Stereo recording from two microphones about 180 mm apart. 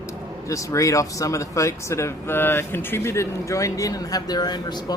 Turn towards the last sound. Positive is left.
turn(degrees=20)  # may be behind; listen again after turning